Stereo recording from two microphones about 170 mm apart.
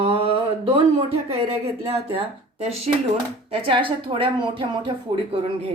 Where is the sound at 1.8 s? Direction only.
35° right (ahead or behind).